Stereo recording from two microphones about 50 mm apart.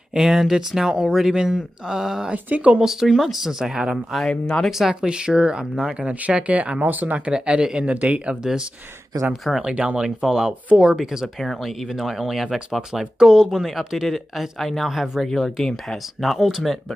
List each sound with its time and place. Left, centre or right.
0.1 s speech: centre
2.3 s speech: right
2.8 s speech: centre
3.9 s speech: centre
5.1 s speech: centre; by 7.2 s right
7.2 s speech: centre
9.6 s speech: right
10.2 s speech: centre
11.3 s speech: centre
13.0 s speech: centre
13.6 s speech: centre
15.2 s speech: centre